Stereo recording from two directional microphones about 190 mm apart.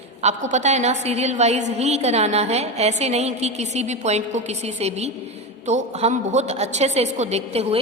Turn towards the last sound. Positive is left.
turn(degrees=-35)  # may be behind; listen again after turning